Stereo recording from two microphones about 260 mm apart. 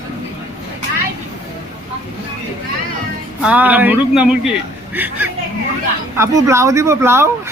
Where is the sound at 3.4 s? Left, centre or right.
Centre.